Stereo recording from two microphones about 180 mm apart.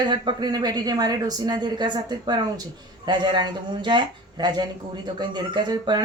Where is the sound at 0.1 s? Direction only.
25° right (ahead or behind).